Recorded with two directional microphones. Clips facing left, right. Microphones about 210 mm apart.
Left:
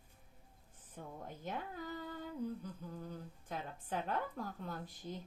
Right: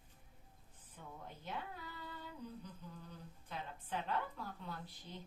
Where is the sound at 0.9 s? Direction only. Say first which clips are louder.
Left 5 dB; 45° left (ahead or behind).